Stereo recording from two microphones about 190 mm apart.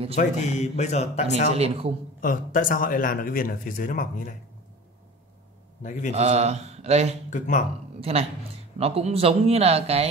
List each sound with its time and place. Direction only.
0.2 s speech: 35° left (ahead or behind)
1.5 s speech: 35° right (ahead or behind)
2.2 s speech: 45° left (ahead or behind)
5.8 s a man's voice: 45° left (ahead or behind)
6.1 s speech: 35° right (ahead or behind)
7.2 s speech: 40° left (ahead or behind)
8.0 s speech: 30° right (ahead or behind)